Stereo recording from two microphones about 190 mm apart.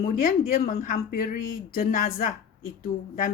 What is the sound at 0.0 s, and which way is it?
Speech, 50° left (ahead or behind).